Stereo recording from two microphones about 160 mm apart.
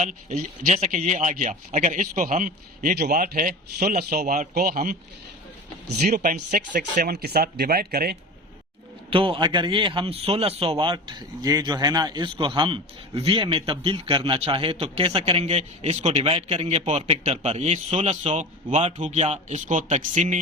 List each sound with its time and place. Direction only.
0.0 s a man's voice: 55° right (ahead or behind)
6.0 s speech: 50° right (ahead or behind); by 8.1 s 75° right (ahead or behind)
9.0 s a man's voice: 35° right (ahead or behind); by 20.4 s 50° right (ahead or behind)